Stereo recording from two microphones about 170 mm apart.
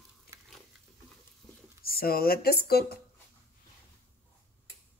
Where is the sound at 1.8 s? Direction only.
60° left (ahead or behind).